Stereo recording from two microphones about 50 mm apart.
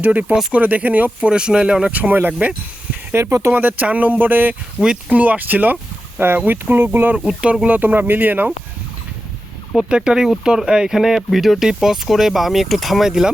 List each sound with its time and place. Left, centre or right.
0.0 s speech: right
1.3 s speech: centre
1.9 s speech: right
3.2 s speech: right
3.5 s speech: right
6.1 s speech: right
7.3 s speech: centre
7.8 s speech: right
9.7 s speech: centre
13.1 s speech: centre